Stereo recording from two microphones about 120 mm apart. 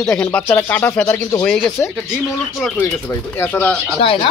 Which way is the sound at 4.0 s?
50° left (ahead or behind).